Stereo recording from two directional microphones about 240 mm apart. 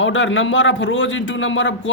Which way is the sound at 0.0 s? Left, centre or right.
Left.